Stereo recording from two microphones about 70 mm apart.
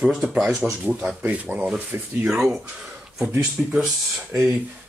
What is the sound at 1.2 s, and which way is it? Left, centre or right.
Speech, right.